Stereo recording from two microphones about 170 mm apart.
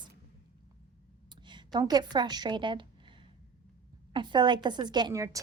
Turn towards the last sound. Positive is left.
turn(degrees=-20)  # may be behind; listen again after turning